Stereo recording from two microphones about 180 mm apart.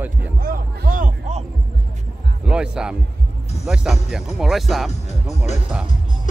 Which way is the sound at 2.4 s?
5° right (ahead or behind).